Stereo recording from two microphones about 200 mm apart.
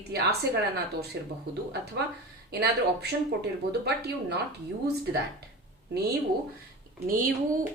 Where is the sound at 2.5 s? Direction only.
55° right (ahead or behind).